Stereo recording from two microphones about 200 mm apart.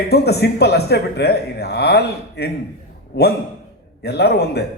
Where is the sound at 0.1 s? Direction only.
55° left (ahead or behind).